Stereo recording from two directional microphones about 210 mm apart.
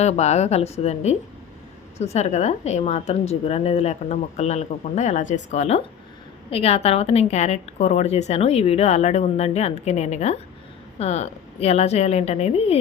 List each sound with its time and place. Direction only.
0.0 s a woman's voice: 30° left (ahead or behind)